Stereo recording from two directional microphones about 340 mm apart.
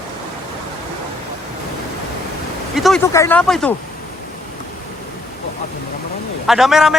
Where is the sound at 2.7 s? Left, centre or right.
Centre.